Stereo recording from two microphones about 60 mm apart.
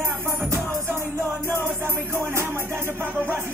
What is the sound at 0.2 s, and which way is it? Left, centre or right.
Music, right.